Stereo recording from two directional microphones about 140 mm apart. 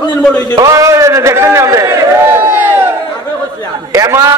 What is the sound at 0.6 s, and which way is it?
A man's voice, 20° right (ahead or behind).